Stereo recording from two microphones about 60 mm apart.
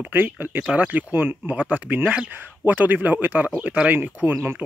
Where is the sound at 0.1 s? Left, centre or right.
Right.